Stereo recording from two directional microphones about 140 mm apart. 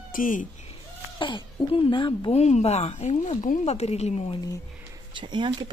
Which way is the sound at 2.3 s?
50° left (ahead or behind).